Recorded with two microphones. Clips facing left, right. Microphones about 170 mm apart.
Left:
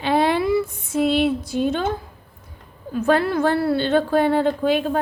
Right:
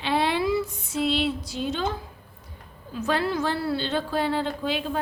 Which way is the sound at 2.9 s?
55° left (ahead or behind).